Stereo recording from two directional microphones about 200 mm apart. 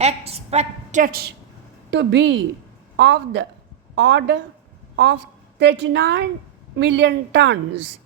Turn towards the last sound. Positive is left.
turn(degrees=-60)  # may be behind; listen again after turning